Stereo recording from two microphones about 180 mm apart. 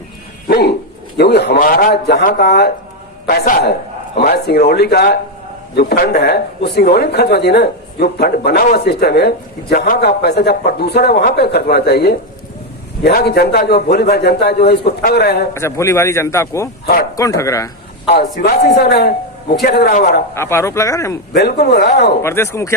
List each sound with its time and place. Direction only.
0.4 s dog: 60° left (ahead or behind)
1.1 s speech: 65° left (ahead or behind)
3.2 s speech: 50° left (ahead or behind)
15.5 s speech: 15° left (ahead or behind)
18.1 s speech: 60° left (ahead or behind)
20.3 s speech: 15° left (ahead or behind)
21.3 s speech: 65° left (ahead or behind)
22.2 s speech: 15° left (ahead or behind)